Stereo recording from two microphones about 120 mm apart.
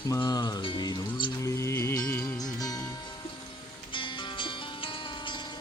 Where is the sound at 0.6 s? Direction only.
45° left (ahead or behind).